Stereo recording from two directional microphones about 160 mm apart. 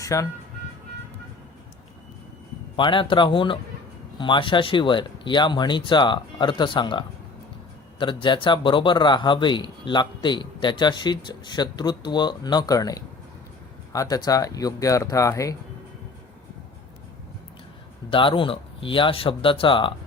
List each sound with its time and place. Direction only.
0.0 s speech: 20° left (ahead or behind)
2.7 s a man's voice: 30° left (ahead or behind)
18.1 s speech: 30° left (ahead or behind)